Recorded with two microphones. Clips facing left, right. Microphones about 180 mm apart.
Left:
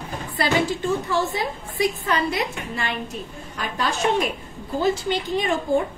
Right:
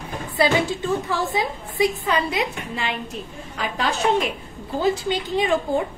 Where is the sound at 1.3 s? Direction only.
15° right (ahead or behind).